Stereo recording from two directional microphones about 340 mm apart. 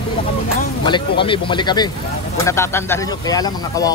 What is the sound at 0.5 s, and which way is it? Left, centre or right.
Speech, centre.